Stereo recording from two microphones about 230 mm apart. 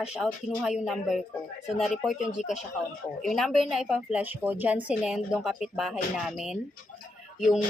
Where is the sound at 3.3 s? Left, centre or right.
Centre.